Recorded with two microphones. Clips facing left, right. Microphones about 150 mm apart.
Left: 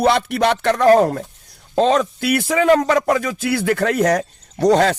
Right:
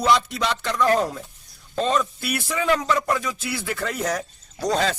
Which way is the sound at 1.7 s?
80° left.